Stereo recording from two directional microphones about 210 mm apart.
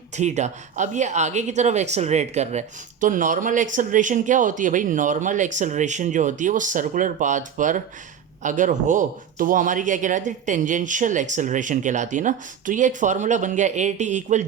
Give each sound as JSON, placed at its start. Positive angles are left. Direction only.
{"t": 0.2, "sound": "speech", "side_deg": -35}